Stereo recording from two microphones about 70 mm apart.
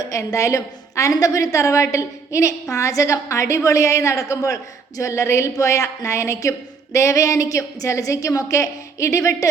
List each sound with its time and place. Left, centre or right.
0.0 s a woman's voice: left